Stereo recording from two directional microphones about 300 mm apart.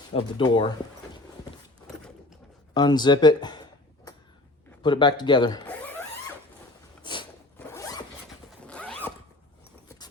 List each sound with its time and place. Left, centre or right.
0.1 s speech: centre
2.7 s speech: centre
4.8 s speech: centre
7.0 s zipper: centre